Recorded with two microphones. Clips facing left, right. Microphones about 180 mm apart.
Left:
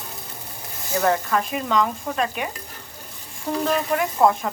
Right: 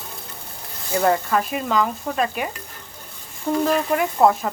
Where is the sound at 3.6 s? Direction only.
5° right (ahead or behind).